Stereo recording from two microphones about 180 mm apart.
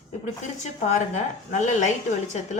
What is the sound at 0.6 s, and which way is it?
A woman's voice, 40° left (ahead or behind).